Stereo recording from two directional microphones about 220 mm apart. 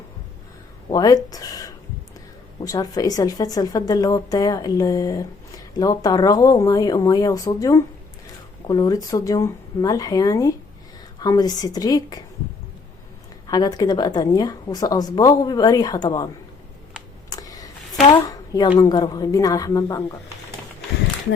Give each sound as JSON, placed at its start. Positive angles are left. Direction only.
{"t": 0.9, "sound": "a woman's voice", "side_deg": 15}
{"t": 13.5, "sound": "a woman's voice", "side_deg": 20}
{"t": 17.2, "sound": "a sound", "side_deg": 15}
{"t": 18.8, "sound": "a woman's voice", "side_deg": 20}